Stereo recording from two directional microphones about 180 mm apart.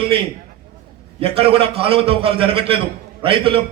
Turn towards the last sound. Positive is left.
turn(degrees=-30)  # may be behind; listen again after turning